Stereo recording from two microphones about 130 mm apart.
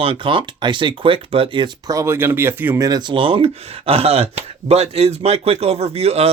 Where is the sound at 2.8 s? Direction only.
30° right (ahead or behind); by 6.3 s 50° right (ahead or behind).